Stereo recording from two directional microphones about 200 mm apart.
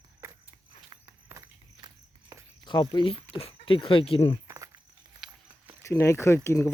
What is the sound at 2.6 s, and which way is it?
Speech, 20° left (ahead or behind).